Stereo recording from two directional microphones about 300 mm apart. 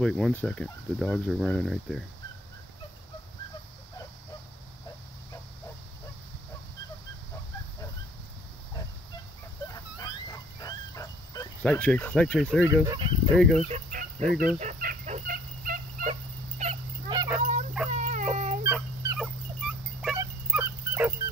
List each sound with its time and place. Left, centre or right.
0.0 s speech: centre
9.7 s dog: centre
12.8 s speech: centre
13.4 s speech: centre
13.7 s fowl: right
14.3 s speech: centre
14.6 s fowl: right
17.9 s baby cry: right
18.3 s music: right
18.6 s a sound: centre
19.1 s dog: centre